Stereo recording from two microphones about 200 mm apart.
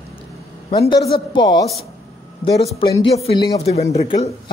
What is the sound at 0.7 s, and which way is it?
A woman's voice, 20° left (ahead or behind).